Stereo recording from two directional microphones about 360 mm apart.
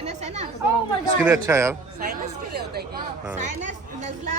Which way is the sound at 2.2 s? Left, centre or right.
Right.